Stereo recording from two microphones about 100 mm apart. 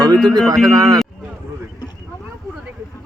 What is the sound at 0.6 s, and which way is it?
Speech, 35° right (ahead or behind).